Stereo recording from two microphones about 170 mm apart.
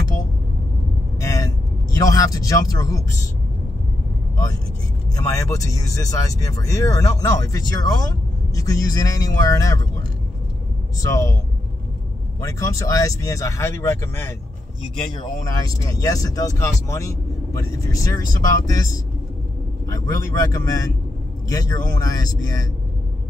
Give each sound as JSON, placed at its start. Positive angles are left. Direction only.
{"t": 1.2, "sound": "vehicle", "side_deg": 20}
{"t": 2.0, "sound": "speech", "side_deg": 20}
{"t": 5.1, "sound": "speech", "side_deg": 20}
{"t": 11.0, "sound": "speech", "side_deg": 20}
{"t": 12.4, "sound": "speech", "side_deg": 20}
{"t": 15.6, "sound": "speech", "side_deg": 20}
{"t": 19.9, "sound": "speech", "side_deg": 20}